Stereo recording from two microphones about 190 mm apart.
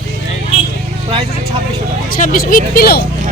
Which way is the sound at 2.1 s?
50° left (ahead or behind).